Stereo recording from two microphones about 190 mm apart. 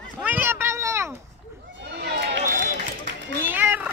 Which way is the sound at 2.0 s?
60° right (ahead or behind).